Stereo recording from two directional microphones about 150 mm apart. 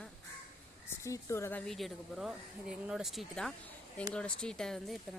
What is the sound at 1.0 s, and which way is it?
A woman's voice, 20° left (ahead or behind).